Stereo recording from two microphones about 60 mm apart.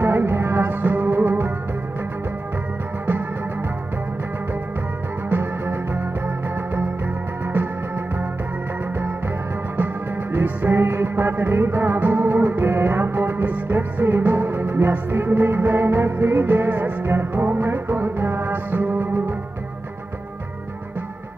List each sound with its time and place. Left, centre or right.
0.0 s music: right
5.3 s music: right
10.3 s music: right